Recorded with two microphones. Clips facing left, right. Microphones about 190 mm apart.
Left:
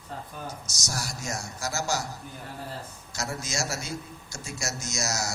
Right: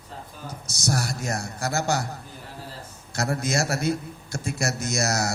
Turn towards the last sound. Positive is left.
turn(degrees=-60)  # may be behind; listen again after turning